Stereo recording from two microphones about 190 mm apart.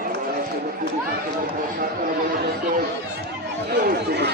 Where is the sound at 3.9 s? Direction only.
60° right (ahead or behind).